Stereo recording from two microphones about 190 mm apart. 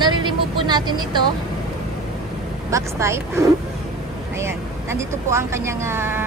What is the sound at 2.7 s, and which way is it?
Speech, 15° right (ahead or behind).